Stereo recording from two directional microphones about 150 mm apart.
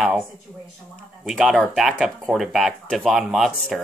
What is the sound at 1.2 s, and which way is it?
Speech, centre (ahead or behind).